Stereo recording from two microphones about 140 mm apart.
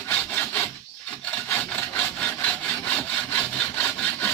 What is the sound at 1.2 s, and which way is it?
Wood, 10° left (ahead or behind).